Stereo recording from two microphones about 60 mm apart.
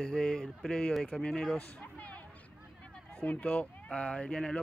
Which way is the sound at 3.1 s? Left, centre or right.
Left.